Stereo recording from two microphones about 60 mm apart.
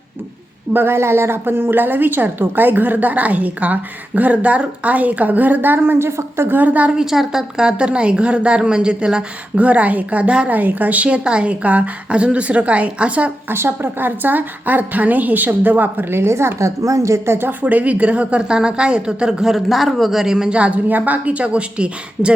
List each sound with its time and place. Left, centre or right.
0.7 s a woman's voice: right
6.6 s a woman's voice: right
6.9 s a woman's voice: centre
13.5 s a woman's voice: right
17.3 s speech: right